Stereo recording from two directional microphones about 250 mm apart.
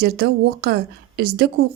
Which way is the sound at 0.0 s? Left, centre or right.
Right.